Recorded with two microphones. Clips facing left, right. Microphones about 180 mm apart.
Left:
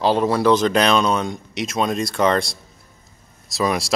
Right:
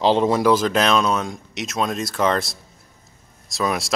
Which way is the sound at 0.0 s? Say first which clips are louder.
Right 1 dB; 20° right (ahead or behind).